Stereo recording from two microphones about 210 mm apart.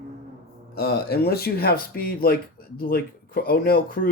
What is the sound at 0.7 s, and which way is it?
Speech, 50° left (ahead or behind).